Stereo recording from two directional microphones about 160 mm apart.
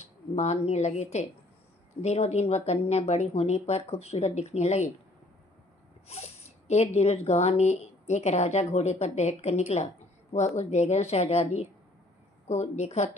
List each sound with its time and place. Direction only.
0.0 s speech: 45° left (ahead or behind)
6.0 s speech: 40° left (ahead or behind)